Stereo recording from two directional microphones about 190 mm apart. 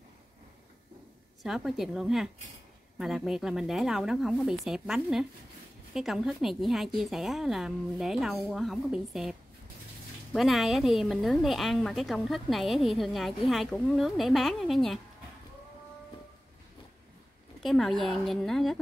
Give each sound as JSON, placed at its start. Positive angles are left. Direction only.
{"t": 1.4, "sound": "a woman's voice", "side_deg": 0}
{"t": 17.6, "sound": "a woman's voice", "side_deg": 0}